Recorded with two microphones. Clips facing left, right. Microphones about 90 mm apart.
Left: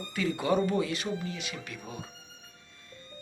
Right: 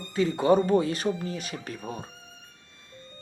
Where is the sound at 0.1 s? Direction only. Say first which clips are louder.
Right 6 dB; 30° right (ahead or behind).